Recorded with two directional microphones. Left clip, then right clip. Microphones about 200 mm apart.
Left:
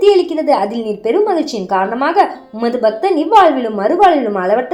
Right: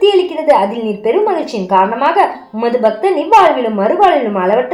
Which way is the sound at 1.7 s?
40° left (ahead or behind).